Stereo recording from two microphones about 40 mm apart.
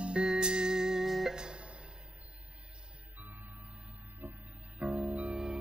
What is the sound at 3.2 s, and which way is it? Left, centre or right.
Music, right.